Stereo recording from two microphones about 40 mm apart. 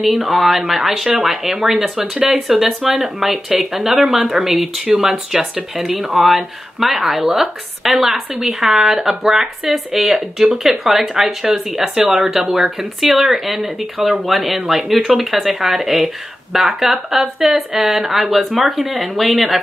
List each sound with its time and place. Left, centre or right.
0.0 s speech: centre
2.3 s speech: centre